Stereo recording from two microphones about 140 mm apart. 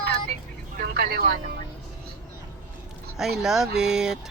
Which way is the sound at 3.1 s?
5° right (ahead or behind).